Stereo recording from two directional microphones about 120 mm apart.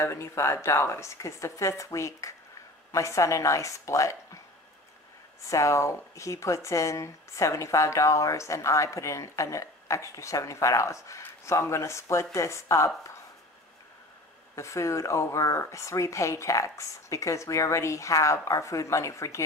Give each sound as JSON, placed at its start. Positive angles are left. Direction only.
{"t": 0.0, "sound": "speech", "side_deg": 25}
{"t": 5.5, "sound": "speech", "side_deg": 25}
{"t": 14.5, "sound": "speech", "side_deg": 25}